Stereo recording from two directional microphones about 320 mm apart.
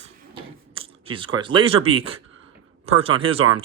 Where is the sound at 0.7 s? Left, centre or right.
Centre.